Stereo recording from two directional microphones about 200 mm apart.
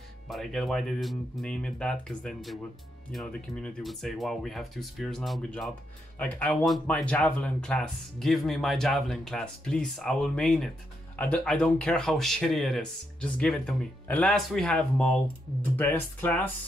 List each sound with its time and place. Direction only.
0.3 s speech: centre (ahead or behind)